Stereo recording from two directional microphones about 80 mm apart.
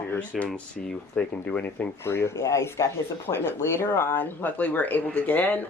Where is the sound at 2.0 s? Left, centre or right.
Left.